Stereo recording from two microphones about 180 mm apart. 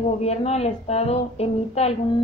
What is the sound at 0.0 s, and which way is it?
Speech, 35° left (ahead or behind).